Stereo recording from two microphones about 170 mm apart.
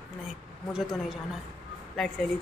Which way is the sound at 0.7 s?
5° right (ahead or behind).